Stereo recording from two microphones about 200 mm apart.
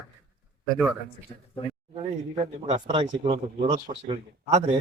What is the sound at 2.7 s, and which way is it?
Speech, 25° right (ahead or behind).